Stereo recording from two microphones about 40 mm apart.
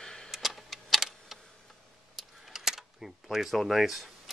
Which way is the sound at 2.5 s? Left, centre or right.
Centre.